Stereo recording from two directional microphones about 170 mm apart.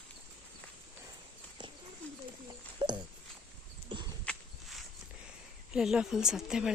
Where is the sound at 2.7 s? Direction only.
25° right (ahead or behind).